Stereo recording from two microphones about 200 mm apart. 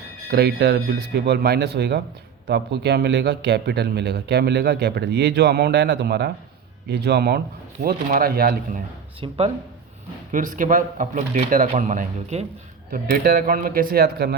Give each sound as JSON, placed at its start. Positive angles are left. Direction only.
{"t": 0.3, "sound": "a man's voice", "side_deg": -50}
{"t": 9.2, "sound": "speech", "side_deg": -25}
{"t": 10.3, "sound": "speech", "side_deg": -40}
{"t": 12.9, "sound": "speech", "side_deg": -45}